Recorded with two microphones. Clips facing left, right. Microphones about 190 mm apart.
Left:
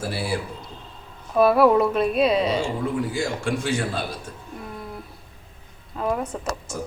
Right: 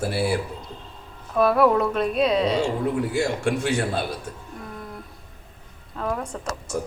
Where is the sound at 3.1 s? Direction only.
65° right (ahead or behind).